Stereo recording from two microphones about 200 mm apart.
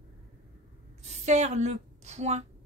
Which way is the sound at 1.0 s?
35° right (ahead or behind).